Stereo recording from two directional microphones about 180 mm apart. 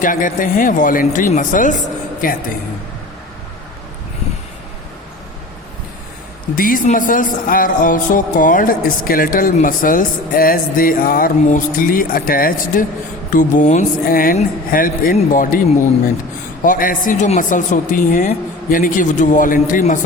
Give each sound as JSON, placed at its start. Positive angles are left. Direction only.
{"t": 0.0, "sound": "speech", "side_deg": 50}
{"t": 6.6, "sound": "speech", "side_deg": 50}
{"t": 16.6, "sound": "speech", "side_deg": 50}